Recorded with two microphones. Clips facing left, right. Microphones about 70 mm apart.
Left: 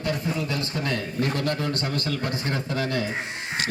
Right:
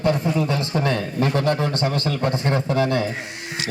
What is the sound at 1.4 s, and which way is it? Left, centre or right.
A man's voice, right.